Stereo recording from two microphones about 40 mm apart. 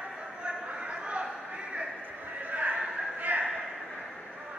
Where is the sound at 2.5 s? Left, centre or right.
Right.